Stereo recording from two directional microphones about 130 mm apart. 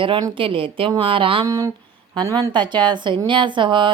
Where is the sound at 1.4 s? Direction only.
30° right (ahead or behind).